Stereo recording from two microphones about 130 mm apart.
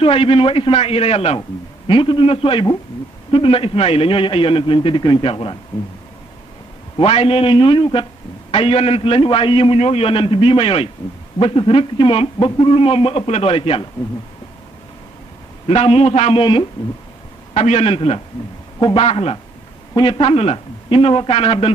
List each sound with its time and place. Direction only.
0.0 s a man's voice: 45° left (ahead or behind)
7.0 s a man's voice: 45° left (ahead or behind)
15.6 s a man's voice: 50° left (ahead or behind)
17.6 s a man's voice: 55° left (ahead or behind)
18.8 s a man's voice: 35° left (ahead or behind)
19.0 s a man's voice: 50° left (ahead or behind)